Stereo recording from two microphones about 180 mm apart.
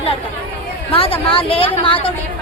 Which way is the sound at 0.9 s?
30° left (ahead or behind).